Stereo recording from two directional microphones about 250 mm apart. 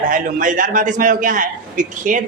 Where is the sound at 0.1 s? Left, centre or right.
Right.